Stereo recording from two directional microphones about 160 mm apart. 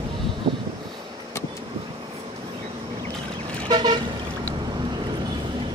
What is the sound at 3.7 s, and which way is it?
Vehicle, 25° right (ahead or behind).